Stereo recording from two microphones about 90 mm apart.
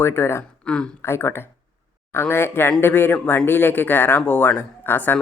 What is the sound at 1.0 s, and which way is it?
Speech, 30° left (ahead or behind).